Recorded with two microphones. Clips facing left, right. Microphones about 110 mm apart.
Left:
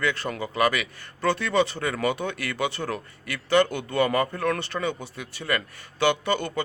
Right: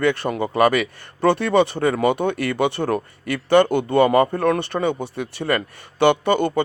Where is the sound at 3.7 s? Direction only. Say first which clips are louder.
Right 8 dB; 25° right (ahead or behind).